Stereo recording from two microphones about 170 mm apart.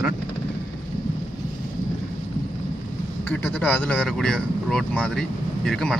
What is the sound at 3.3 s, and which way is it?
Speech, 10° left (ahead or behind).